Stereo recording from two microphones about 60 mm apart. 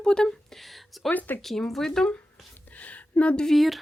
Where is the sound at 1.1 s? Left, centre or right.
Left.